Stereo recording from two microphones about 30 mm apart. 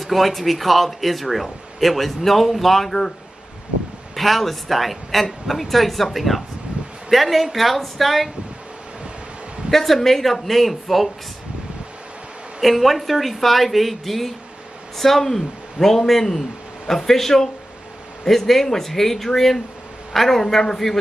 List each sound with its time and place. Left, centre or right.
0.0 s speech: centre
4.1 s speech: centre
9.7 s speech: centre
12.6 s a man's voice: centre
20.4 s a man's voice: centre